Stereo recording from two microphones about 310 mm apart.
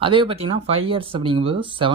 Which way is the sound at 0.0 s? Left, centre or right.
Centre.